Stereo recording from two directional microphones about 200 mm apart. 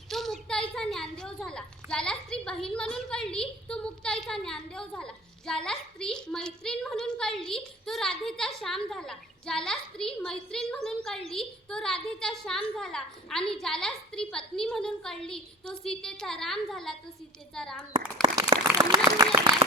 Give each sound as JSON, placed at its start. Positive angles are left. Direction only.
{"t": 0.1, "sound": "a sound", "side_deg": 0}
{"t": 0.7, "sound": "a woman's voice", "side_deg": 0}
{"t": 17.9, "sound": "speech", "side_deg": -25}